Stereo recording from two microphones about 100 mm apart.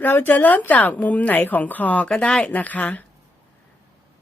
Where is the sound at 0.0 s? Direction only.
20° left (ahead or behind).